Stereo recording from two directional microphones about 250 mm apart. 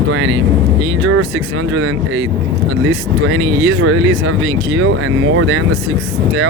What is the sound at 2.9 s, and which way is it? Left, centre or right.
Speech, right.